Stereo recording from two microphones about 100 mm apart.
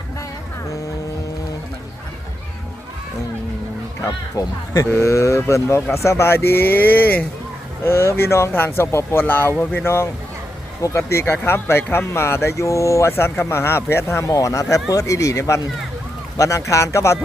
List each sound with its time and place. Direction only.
4.4 s speech: 25° left (ahead or behind)
14.3 s speech: 35° left (ahead or behind)